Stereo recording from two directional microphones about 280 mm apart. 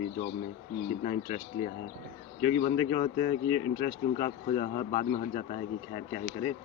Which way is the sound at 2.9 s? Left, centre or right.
Left.